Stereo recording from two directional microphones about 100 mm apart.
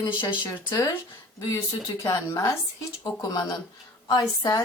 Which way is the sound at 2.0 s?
30° left (ahead or behind).